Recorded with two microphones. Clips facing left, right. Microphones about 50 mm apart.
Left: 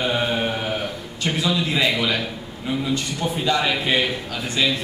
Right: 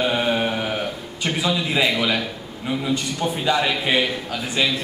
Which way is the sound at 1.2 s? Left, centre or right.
Centre.